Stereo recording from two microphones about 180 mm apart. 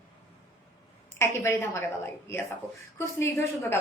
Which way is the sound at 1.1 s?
15° left (ahead or behind).